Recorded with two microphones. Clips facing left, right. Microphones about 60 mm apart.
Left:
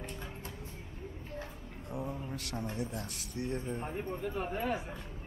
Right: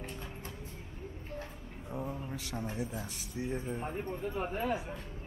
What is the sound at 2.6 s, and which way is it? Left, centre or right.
Speech, centre.